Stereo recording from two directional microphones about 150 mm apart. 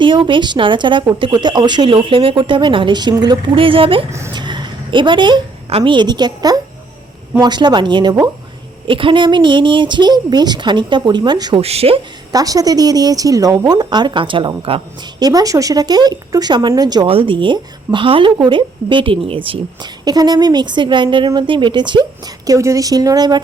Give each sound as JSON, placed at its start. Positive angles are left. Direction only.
{"t": 0.0, "sound": "a woman's voice", "side_deg": -35}
{"t": 11.6, "sound": "speech", "side_deg": -40}
{"t": 12.3, "sound": "speech", "side_deg": -25}
{"t": 15.2, "sound": "speech", "side_deg": -25}